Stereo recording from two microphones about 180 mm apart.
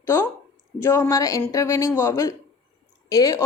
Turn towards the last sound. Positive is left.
turn(degrees=20)  # may be behind; listen again after turning